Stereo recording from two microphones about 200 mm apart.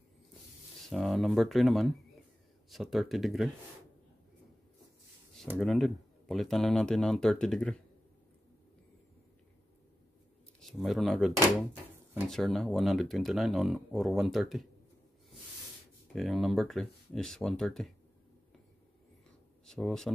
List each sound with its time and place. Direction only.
0.8 s speech: centre (ahead or behind)
5.6 s speech: centre (ahead or behind)
10.6 s speech: centre (ahead or behind)
16.2 s speech: centre (ahead or behind)
19.6 s speech: 5° left (ahead or behind)